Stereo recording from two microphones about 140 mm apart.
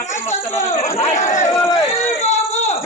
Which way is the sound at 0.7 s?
50° left (ahead or behind).